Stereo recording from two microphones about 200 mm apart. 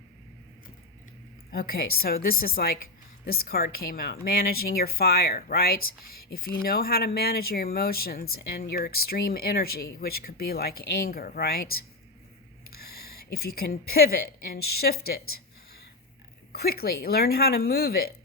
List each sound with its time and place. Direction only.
1.5 s speech: 50° left (ahead or behind)
12.8 s speech: 50° left (ahead or behind)
16.5 s speech: 50° left (ahead or behind)